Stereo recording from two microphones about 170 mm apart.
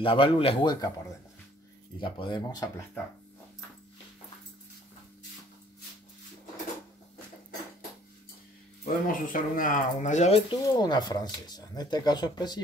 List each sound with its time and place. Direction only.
0.0 s speech: 30° left (ahead or behind)
2.0 s speech: 30° left (ahead or behind)
8.8 s speech: 55° left (ahead or behind)
10.5 s speech: 25° left (ahead or behind)